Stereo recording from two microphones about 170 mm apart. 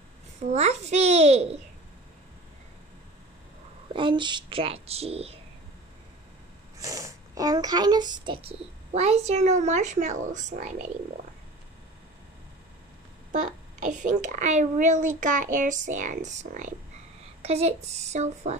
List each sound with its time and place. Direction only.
0.4 s a child's voice: 40° right (ahead or behind)
3.9 s a child's voice: 30° right (ahead or behind)
6.8 s a child's voice: 20° right (ahead or behind); by 10.7 s 45° right (ahead or behind)
13.3 s a child's voice: 45° right (ahead or behind)